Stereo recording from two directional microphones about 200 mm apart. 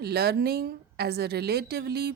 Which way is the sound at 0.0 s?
50° right (ahead or behind).